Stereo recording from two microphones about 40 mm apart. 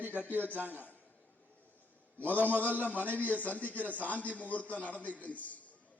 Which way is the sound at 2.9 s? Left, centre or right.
Right.